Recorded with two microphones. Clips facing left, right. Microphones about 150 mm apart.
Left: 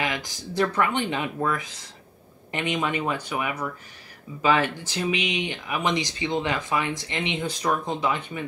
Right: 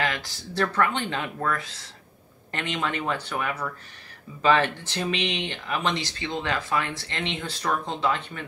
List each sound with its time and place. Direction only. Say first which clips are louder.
0.0 s speech: even; 15° left (ahead or behind)